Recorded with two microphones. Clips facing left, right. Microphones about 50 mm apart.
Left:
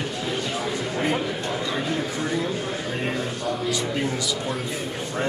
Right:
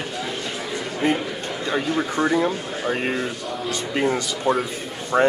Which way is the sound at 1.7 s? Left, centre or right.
Right.